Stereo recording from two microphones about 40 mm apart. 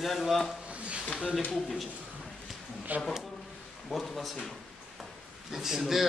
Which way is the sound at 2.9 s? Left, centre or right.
Right.